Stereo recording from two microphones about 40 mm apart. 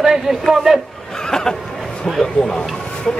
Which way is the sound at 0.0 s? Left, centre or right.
Centre.